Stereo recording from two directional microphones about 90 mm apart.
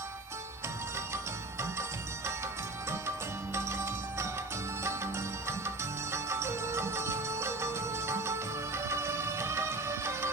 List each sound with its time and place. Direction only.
3.5 s music: 30° right (ahead or behind)